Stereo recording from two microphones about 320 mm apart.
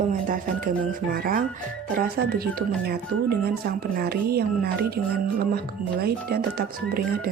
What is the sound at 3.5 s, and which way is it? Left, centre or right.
Speech, right.